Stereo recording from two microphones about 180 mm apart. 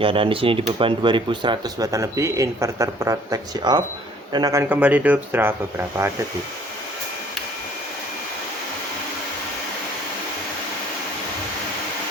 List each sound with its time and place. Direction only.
0.0 s speech: 30° right (ahead or behind); by 6.1 s 10° right (ahead or behind)